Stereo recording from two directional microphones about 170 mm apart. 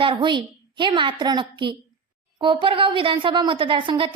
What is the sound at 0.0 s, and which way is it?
A woman's voice, 30° right (ahead or behind).